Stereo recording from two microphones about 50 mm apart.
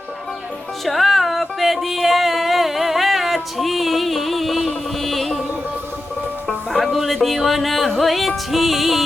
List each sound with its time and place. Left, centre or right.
0.9 s music: centre
6.7 s music: centre